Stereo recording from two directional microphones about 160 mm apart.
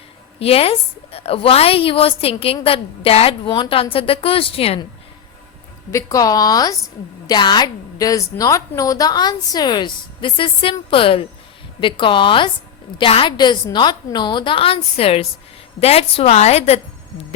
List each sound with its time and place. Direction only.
0.3 s a woman's voice: 35° left (ahead or behind)
5.9 s a woman's voice: 20° left (ahead or behind); by 16.8 s 40° left (ahead or behind)